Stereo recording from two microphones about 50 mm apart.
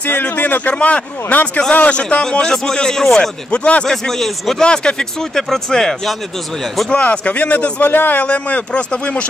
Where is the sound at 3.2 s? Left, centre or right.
Left.